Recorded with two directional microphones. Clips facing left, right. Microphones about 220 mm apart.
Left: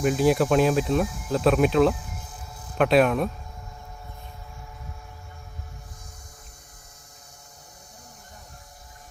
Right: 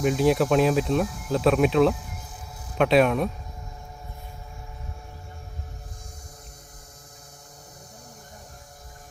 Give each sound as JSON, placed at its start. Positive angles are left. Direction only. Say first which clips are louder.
{"t": 0.0, "sound": "speech", "louder": "even", "side_deg": 0}